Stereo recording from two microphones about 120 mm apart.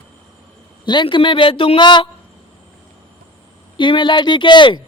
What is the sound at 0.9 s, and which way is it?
Speech, 40° left (ahead or behind).